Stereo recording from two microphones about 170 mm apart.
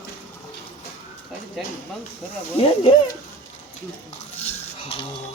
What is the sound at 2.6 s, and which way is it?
Speech, 30° left (ahead or behind).